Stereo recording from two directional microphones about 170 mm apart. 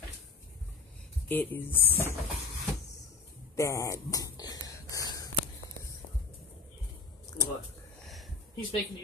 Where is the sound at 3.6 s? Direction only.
15° left (ahead or behind).